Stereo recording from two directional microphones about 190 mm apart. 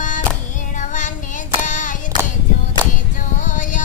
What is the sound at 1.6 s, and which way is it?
Child singing, 45° left (ahead or behind).